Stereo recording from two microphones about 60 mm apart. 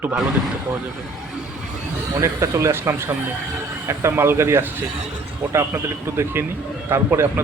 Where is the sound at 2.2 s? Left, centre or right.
Right.